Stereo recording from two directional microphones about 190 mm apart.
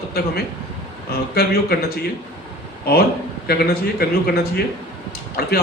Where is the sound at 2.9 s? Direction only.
55° left (ahead or behind).